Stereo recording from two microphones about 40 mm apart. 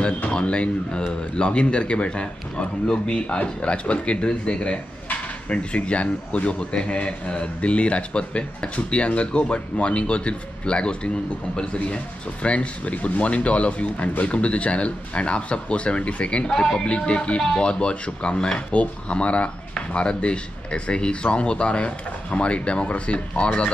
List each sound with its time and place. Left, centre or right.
0.3 s speech: left
12.4 s speech: left
16.4 s speech: centre
16.8 s speech: left